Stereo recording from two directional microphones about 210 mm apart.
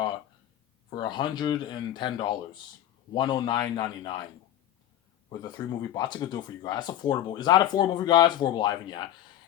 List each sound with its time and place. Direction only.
0.9 s speech: 20° left (ahead or behind)
5.3 s speech: 20° left (ahead or behind)